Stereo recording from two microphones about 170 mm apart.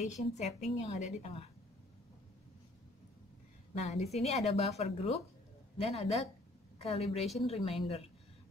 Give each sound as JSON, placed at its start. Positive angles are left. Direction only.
{"t": 0.0, "sound": "a woman's voice", "side_deg": 45}
{"t": 3.8, "sound": "a woman's voice", "side_deg": 40}